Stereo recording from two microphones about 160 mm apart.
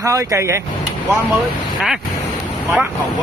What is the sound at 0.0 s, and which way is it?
Speech, 20° right (ahead or behind).